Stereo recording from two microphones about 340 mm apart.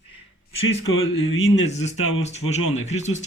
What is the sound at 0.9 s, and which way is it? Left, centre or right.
Speech, left.